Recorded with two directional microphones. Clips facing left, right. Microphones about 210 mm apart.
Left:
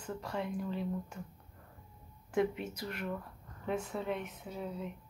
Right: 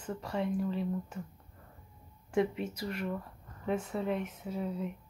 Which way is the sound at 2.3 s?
5° right (ahead or behind).